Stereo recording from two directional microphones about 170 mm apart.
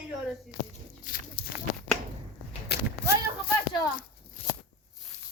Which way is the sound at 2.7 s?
75° left (ahead or behind).